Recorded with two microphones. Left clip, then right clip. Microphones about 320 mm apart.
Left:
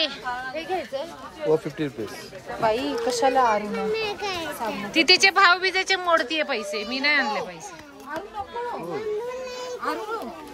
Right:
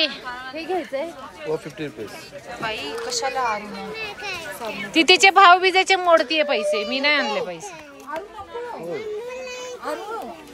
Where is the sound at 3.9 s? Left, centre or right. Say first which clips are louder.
Even; centre.